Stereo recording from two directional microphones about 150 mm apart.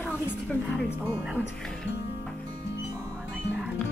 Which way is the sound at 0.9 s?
15° right (ahead or behind).